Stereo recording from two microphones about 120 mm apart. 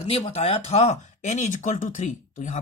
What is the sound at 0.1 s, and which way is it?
Speech, 55° left (ahead or behind).